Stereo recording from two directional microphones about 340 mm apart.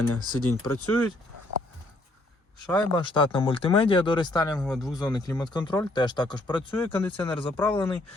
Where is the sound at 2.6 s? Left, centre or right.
Centre.